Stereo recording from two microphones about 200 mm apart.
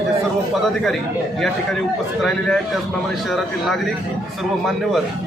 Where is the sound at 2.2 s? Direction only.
Centre (ahead or behind).